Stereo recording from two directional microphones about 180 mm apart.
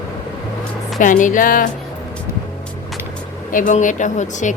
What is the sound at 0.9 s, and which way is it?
Speech, 45° left (ahead or behind).